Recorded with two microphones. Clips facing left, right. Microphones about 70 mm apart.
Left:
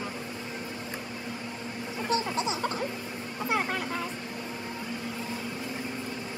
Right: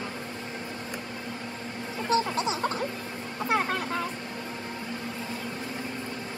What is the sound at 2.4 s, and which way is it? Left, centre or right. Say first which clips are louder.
Music: right 2 dB; right.